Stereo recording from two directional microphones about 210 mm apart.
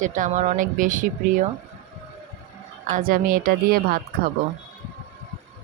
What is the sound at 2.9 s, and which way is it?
A woman's voice, 40° right (ahead or behind).